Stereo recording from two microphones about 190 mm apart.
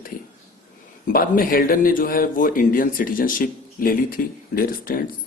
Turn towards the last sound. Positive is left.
turn(degrees=50)  # may be behind; listen again after turning